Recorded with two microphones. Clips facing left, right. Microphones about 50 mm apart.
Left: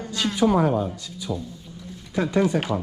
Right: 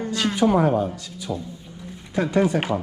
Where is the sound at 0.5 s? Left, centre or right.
Right.